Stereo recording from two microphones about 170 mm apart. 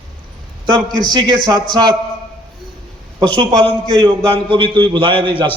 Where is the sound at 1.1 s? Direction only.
25° right (ahead or behind).